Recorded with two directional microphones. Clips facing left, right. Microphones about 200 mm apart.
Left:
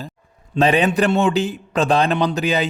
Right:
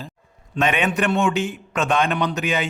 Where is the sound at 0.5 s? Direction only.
35° left (ahead or behind).